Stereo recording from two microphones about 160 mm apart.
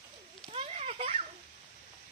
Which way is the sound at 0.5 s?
40° right (ahead or behind).